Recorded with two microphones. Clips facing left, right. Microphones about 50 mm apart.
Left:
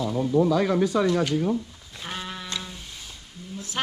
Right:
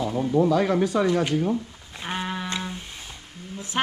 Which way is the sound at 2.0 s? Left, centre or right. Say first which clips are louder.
Right 5 dB; right.